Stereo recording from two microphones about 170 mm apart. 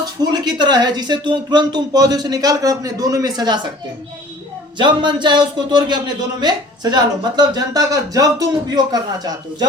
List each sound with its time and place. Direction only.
0.0 s a man's voice: 25° right (ahead or behind)
4.8 s a man's voice: 25° right (ahead or behind)